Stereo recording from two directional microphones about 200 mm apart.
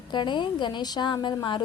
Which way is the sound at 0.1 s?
25° left (ahead or behind).